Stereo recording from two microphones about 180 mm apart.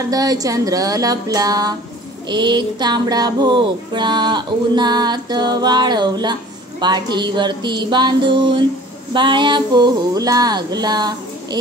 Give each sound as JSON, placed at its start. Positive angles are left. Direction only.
{"t": 0.1, "sound": "speech", "side_deg": -20}